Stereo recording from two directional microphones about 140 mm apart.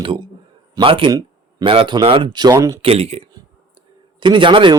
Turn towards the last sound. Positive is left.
turn(degrees=-35)  # may be behind; listen again after turning